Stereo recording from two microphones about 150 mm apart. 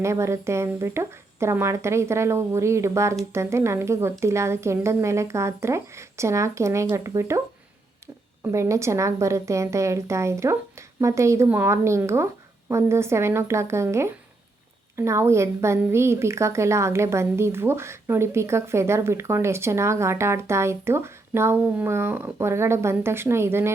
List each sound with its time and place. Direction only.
0.0 s a woman's voice: 20° right (ahead or behind)